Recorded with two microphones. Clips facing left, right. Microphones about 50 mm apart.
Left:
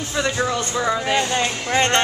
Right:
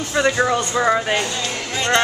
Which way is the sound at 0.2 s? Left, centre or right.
Centre.